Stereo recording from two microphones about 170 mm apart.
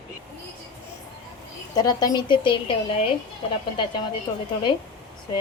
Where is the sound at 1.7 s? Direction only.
25° left (ahead or behind).